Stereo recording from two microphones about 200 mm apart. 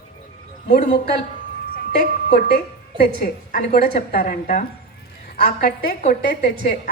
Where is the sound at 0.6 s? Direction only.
35° left (ahead or behind).